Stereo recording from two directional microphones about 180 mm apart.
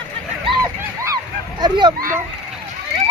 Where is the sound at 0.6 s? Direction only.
15° right (ahead or behind).